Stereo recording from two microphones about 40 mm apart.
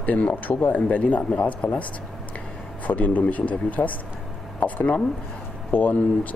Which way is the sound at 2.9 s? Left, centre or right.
Left.